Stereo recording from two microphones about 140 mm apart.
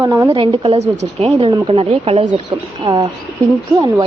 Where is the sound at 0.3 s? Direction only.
40° right (ahead or behind).